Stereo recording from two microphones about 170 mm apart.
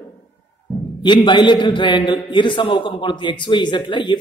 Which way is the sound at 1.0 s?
25° left (ahead or behind).